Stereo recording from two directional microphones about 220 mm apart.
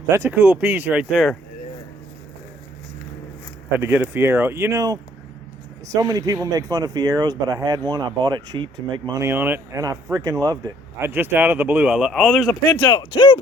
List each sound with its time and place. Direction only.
0.1 s speech: 10° right (ahead or behind)
3.8 s speech: 10° right (ahead or behind)
12.8 s speech: 20° left (ahead or behind)